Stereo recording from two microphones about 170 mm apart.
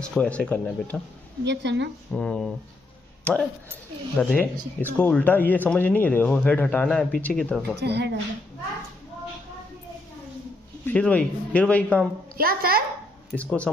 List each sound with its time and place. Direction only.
0.0 s speech: 5° left (ahead or behind)
1.4 s speech: 90° right
2.1 s speech: 5° left (ahead or behind)
7.8 s speech: 90° right
10.9 s speech: 10° left (ahead or behind)
12.4 s a woman's voice: 60° right (ahead or behind)
13.4 s speech: 10° left (ahead or behind)